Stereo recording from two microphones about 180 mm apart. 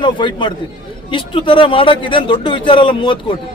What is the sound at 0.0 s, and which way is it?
A man's voice, 25° left (ahead or behind).